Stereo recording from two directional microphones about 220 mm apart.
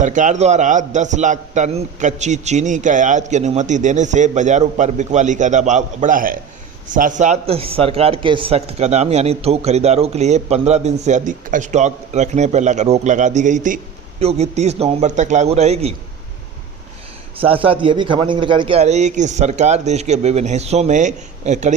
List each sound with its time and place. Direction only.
0.0 s a man's voice: 35° right (ahead or behind)
17.4 s a man's voice: 25° right (ahead or behind)